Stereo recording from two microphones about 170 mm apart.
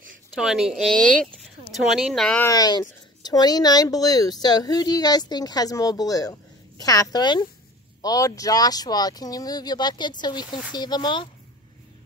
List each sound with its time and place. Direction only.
0.4 s speech: 5° right (ahead or behind)
2.4 s speech: 20° left (ahead or behind)